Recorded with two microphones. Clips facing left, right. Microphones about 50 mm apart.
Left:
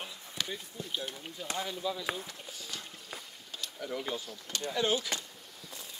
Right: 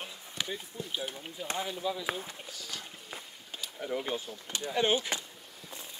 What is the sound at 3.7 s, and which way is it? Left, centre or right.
Speech, right.